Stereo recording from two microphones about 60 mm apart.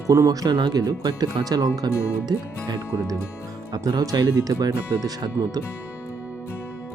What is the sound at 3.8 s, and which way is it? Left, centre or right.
Speech, right.